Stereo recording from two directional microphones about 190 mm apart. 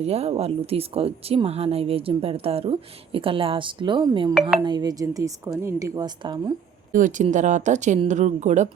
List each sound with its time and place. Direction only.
0.0 s speech: 35° right (ahead or behind)
6.9 s speech: 40° right (ahead or behind)